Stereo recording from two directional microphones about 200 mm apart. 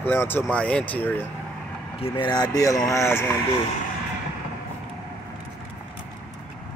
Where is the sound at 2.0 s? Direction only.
25° left (ahead or behind).